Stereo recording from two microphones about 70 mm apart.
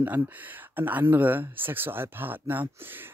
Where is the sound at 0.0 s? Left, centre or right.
Right.